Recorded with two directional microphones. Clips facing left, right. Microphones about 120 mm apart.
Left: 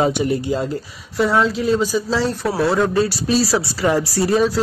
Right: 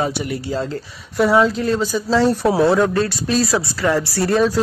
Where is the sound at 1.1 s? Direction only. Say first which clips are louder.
Right 2 dB; centre (ahead or behind).